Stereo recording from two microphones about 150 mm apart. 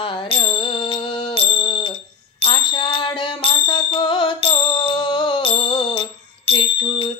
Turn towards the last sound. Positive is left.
turn(degrees=30)  # may be behind; listen again after turning